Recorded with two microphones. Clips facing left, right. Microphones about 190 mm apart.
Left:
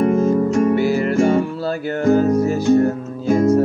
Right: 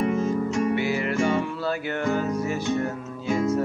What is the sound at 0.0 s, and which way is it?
Music, 50° left (ahead or behind).